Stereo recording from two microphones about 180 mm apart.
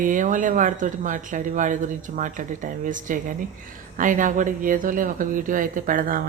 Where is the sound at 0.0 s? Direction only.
45° right (ahead or behind).